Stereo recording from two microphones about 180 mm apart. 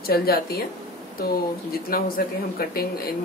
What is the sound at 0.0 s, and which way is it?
Speech, 60° left (ahead or behind).